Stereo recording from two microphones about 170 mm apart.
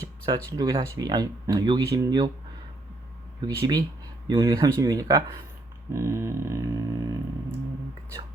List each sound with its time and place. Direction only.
0.0 s speech: 25° right (ahead or behind)
3.4 s speech: 25° right (ahead or behind)
5.9 s a sound: 15° right (ahead or behind)